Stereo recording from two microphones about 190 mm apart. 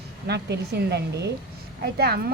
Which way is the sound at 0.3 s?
60° right (ahead or behind).